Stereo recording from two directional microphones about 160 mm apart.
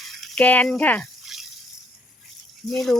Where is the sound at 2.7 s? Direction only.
Centre (ahead or behind).